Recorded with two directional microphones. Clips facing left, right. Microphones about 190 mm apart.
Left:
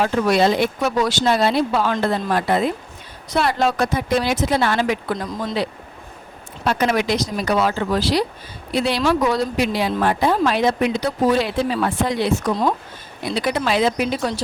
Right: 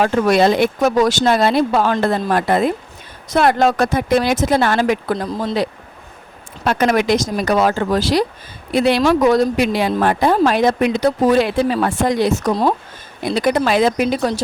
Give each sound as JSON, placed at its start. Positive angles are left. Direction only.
{"t": 0.0, "sound": "speech", "side_deg": -50}
{"t": 6.7, "sound": "speech", "side_deg": -50}